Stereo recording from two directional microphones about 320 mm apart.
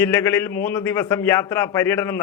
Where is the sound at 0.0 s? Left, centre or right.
Centre.